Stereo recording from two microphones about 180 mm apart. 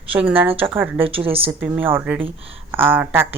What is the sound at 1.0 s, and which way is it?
Speech, 30° right (ahead or behind).